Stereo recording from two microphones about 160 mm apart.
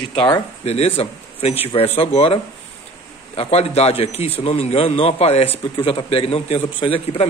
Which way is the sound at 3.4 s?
40° left (ahead or behind).